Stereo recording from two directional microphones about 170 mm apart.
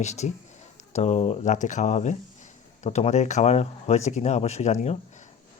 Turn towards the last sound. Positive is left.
turn(degrees=40)  # may be behind; listen again after turning